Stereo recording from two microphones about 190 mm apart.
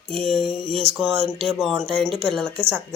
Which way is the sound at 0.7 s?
30° right (ahead or behind).